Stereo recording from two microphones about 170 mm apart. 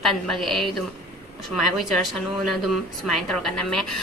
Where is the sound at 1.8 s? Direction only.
Centre (ahead or behind).